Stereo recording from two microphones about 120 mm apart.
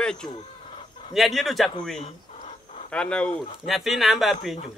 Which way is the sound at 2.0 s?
65° left (ahead or behind).